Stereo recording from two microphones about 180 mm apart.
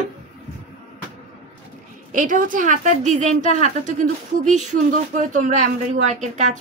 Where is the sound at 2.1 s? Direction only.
45° right (ahead or behind).